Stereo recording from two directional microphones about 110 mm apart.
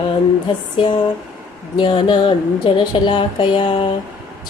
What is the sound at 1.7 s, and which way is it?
Speech, 45° left (ahead or behind).